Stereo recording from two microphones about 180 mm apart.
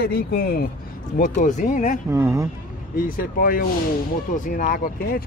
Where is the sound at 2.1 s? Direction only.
15° right (ahead or behind).